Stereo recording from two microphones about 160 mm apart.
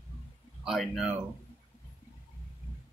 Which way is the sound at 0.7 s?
Centre (ahead or behind).